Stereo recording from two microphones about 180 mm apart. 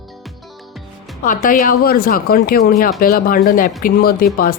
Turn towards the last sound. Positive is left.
turn(degrees=55)  # may be behind; listen again after turning